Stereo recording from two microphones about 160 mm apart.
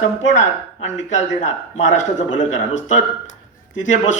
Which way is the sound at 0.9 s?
50° left (ahead or behind).